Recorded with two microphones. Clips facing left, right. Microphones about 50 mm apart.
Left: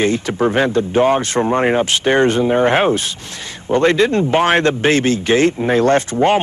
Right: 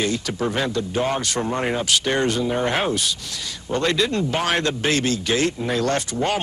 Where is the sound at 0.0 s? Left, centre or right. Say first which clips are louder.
Left 7 dB; left.